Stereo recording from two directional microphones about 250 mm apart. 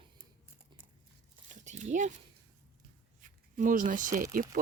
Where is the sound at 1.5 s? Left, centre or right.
Right.